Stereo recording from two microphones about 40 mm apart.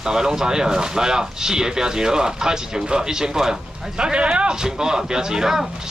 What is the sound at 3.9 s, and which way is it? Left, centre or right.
Speech, right.